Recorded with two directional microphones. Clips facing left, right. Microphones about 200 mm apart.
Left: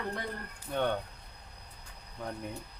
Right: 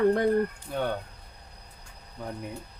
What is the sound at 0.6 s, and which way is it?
Speech, 5° right (ahead or behind).